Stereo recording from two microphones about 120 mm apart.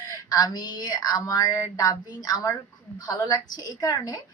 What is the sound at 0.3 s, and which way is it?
Speech, 35° left (ahead or behind).